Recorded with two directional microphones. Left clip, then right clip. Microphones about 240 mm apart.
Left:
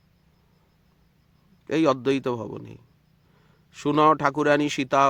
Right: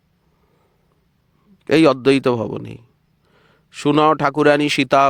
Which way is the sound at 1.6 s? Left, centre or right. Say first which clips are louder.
Right 9 dB; right.